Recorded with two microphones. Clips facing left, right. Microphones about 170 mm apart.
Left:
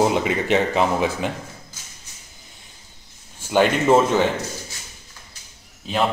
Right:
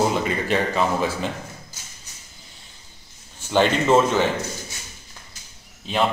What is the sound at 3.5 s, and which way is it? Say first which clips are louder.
Speech: left 2 dB; 10° left (ahead or behind).